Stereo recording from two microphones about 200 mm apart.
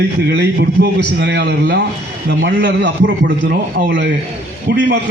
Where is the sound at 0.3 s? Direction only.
55° right (ahead or behind).